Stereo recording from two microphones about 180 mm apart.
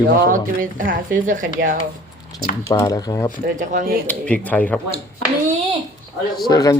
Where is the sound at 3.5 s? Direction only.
45° right (ahead or behind).